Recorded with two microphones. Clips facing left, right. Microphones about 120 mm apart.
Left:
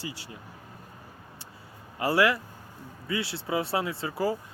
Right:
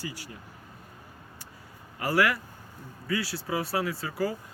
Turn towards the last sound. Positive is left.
turn(degrees=25)  # may be behind; listen again after turning